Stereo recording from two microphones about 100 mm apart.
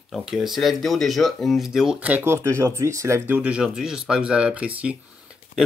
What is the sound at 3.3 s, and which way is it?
Speech, 10° right (ahead or behind).